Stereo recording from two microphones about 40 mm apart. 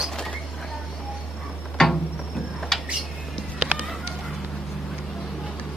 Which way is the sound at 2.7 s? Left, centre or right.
Centre.